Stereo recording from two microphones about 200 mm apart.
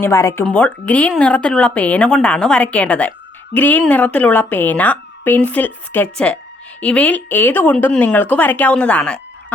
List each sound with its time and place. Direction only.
0.0 s speech: 15° left (ahead or behind)